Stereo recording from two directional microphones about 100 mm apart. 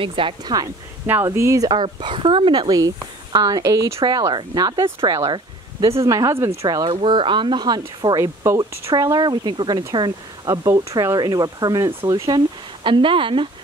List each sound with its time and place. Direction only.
0.0 s speech: 60° right (ahead or behind)
1.2 s speech: 30° right (ahead or behind)
1.7 s speech: 50° right (ahead or behind)
3.3 s speech: 40° right (ahead or behind)
6.9 s speech: 60° right (ahead or behind); by 8.2 s 45° right (ahead or behind)
8.4 s speech: 25° right (ahead or behind)
8.9 s speech: 45° right (ahead or behind)
10.7 s speech: 30° right (ahead or behind)
11.1 s speech: 40° right (ahead or behind); by 13.5 s 60° right (ahead or behind)